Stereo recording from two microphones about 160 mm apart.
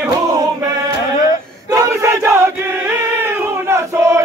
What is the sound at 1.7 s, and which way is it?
Battle cry, 20° right (ahead or behind).